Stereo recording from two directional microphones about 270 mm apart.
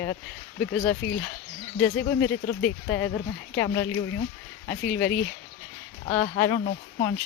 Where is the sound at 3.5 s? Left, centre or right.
Centre.